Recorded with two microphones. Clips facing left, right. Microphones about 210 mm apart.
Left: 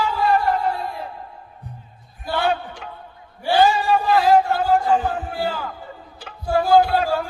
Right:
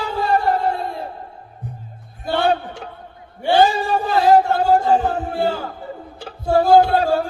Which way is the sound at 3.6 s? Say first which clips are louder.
Even; 40° right (ahead or behind).